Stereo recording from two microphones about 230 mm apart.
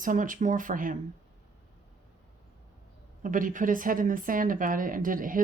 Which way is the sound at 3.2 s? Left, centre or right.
Right.